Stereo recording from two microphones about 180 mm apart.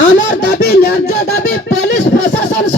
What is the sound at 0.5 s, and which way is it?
Music, 65° left (ahead or behind).